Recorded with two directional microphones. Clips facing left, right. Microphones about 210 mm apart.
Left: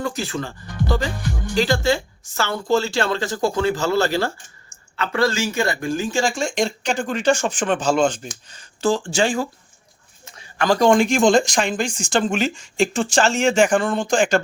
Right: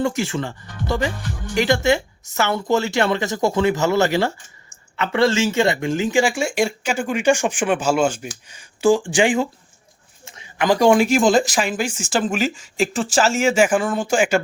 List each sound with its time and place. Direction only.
0.0 s speech: 25° right (ahead or behind); by 14.4 s 10° right (ahead or behind)